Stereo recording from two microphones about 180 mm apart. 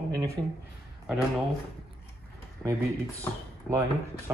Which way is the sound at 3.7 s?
15° right (ahead or behind).